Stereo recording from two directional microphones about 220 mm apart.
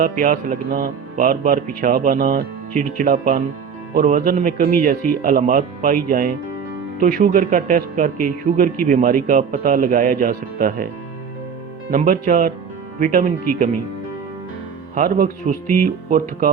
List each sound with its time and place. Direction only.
0.0 s speech: 40° right (ahead or behind)
11.9 s speech: 40° right (ahead or behind)
14.9 s speech: 35° right (ahead or behind)